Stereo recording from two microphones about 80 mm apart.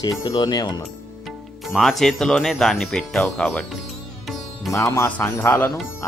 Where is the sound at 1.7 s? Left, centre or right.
Centre.